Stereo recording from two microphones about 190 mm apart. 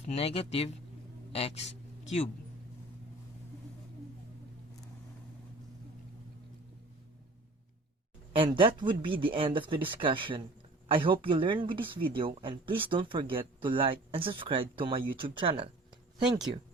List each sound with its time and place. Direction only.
0.0 s speech: 35° left (ahead or behind)
1.3 s a sound: 30° left (ahead or behind)
8.3 s speech: 25° right (ahead or behind)